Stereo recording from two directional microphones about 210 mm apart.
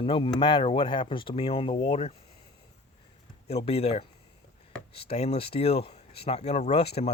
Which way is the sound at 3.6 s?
30° left (ahead or behind).